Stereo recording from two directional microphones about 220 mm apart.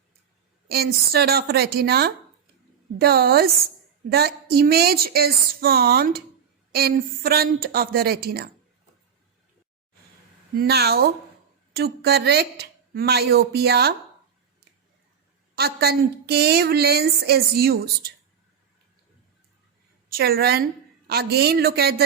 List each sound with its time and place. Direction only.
0.7 s a woman's voice: 45° right (ahead or behind)
10.5 s a woman's voice: 45° right (ahead or behind)
15.5 s a woman's voice: 45° right (ahead or behind)
20.1 s a woman's voice: 45° right (ahead or behind)